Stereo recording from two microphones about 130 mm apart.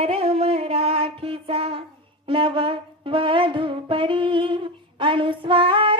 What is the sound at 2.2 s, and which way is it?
Wind instrument, 45° right (ahead or behind).